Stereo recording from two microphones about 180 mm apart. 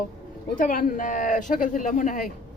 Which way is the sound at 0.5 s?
50° left (ahead or behind).